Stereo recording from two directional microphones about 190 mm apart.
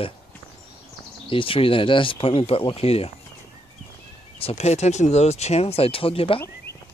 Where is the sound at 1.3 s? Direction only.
30° left (ahead or behind).